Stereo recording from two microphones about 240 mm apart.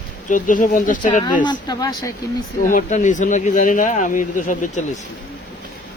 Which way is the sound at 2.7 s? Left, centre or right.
Left.